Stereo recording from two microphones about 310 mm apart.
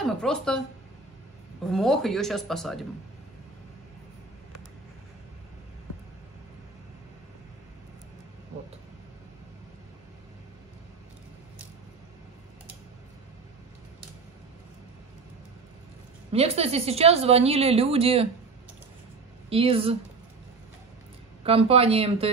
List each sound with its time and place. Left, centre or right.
0.2 s speech: centre
1.7 s speech: centre
16.3 s a woman's voice: centre
19.5 s a woman's voice: centre
21.5 s a woman's voice: centre